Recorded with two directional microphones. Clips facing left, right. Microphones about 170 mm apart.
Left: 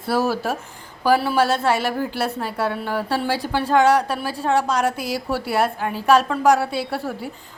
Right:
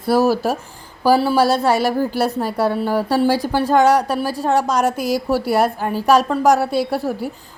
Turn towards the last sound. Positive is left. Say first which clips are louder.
# right 6 dB
turn(degrees=-40)  # may be behind; listen again after turning